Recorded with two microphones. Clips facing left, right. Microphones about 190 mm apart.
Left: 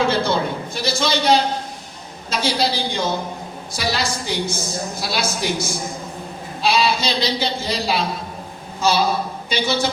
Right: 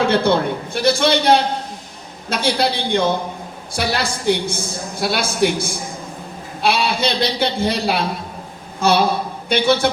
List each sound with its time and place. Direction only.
0.1 s a man's voice: 60° right (ahead or behind)